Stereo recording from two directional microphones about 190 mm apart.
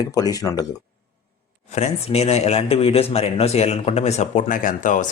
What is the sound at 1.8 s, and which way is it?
Speech, 35° left (ahead or behind).